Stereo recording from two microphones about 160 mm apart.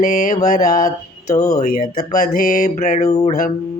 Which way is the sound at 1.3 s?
20° left (ahead or behind).